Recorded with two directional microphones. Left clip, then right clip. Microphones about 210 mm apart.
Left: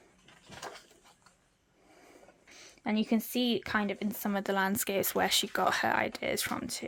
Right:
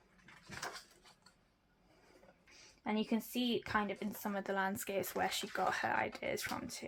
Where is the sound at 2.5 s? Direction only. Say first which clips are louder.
Left 5 dB; 45° left (ahead or behind).